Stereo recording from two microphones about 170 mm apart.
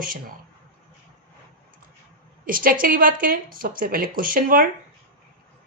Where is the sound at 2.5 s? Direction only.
55° right (ahead or behind).